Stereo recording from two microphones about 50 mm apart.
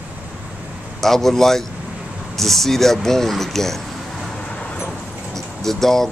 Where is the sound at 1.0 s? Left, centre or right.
Centre.